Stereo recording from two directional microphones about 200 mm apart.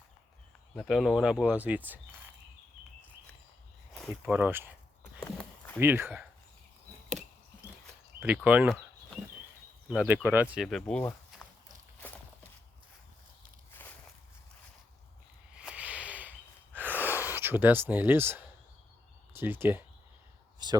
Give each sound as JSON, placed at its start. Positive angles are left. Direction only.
{"t": 0.8, "sound": "speech", "side_deg": 0}
{"t": 3.9, "sound": "speech", "side_deg": 0}
{"t": 5.2, "sound": "walk", "side_deg": 5}
{"t": 5.8, "sound": "speech", "side_deg": -10}
{"t": 8.2, "sound": "speech", "side_deg": -5}
{"t": 9.9, "sound": "speech", "side_deg": -5}
{"t": 13.7, "sound": "walk", "side_deg": 10}
{"t": 15.5, "sound": "a sound", "side_deg": -5}
{"t": 19.3, "sound": "speech", "side_deg": -10}